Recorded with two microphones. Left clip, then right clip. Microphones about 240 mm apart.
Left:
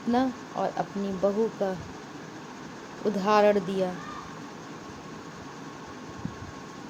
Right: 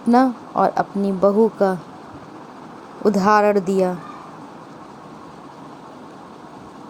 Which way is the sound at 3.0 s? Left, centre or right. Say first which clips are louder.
Right 7 dB; right.